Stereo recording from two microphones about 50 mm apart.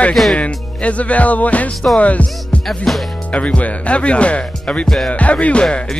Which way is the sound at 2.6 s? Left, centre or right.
Centre.